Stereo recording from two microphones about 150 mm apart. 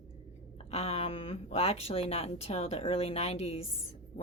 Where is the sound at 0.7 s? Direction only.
40° left (ahead or behind).